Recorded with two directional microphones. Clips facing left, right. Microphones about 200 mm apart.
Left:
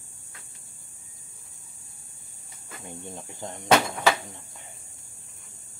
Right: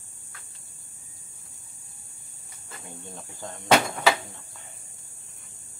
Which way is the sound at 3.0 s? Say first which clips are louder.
Left 2 dB; 20° left (ahead or behind).